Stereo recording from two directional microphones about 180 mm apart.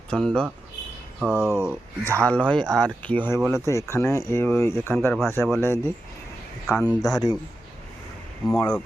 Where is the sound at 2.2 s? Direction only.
5° left (ahead or behind).